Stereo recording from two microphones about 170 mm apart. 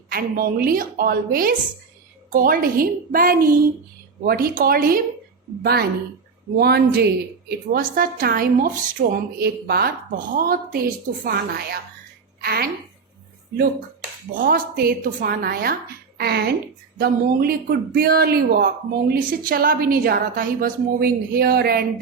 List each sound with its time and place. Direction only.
0.1 s a woman's voice: 60° right (ahead or behind)
14.3 s a woman's voice: 60° right (ahead or behind)